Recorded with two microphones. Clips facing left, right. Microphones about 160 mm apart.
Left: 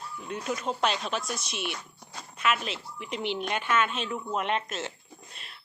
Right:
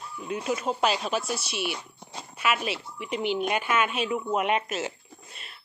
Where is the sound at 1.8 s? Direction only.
25° right (ahead or behind).